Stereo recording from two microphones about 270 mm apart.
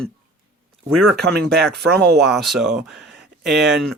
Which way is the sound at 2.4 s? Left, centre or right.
Centre.